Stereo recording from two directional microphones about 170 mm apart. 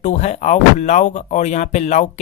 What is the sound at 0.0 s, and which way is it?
Speech, 45° left (ahead or behind).